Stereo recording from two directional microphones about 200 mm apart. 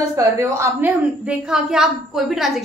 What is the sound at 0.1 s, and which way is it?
A woman's voice, 15° right (ahead or behind).